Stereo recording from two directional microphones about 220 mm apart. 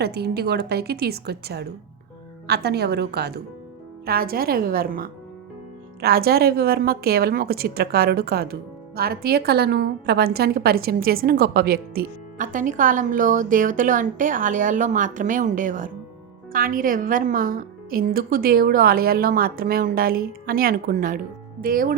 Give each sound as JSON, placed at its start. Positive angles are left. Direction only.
{"t": 0.0, "sound": "a woman's voice", "side_deg": -45}